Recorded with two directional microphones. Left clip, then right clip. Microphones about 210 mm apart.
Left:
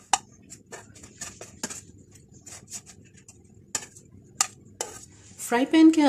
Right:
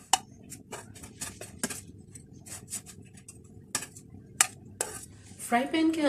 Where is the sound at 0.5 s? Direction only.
Centre (ahead or behind).